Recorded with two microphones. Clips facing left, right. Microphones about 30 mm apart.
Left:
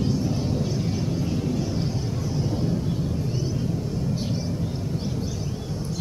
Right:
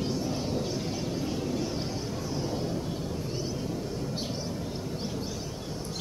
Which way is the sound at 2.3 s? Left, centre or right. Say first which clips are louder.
Left 6 dB; centre.